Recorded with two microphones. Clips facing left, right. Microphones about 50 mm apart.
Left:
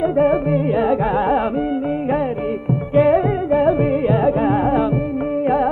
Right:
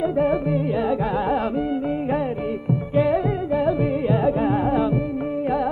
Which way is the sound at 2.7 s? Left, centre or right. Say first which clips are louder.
Left 6 dB; centre.